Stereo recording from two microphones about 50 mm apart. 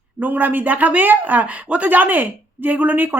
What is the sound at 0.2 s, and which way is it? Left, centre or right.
Speech, right.